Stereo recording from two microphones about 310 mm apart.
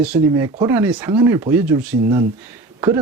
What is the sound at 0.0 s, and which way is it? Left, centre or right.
Speech, centre.